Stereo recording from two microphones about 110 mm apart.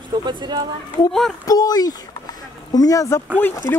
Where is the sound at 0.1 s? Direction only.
45° right (ahead or behind).